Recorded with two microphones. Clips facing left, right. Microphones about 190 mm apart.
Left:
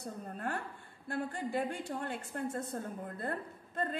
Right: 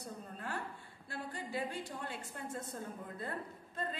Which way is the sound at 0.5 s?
50° left (ahead or behind).